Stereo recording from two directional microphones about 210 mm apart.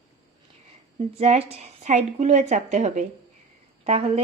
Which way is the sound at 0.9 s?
30° right (ahead or behind).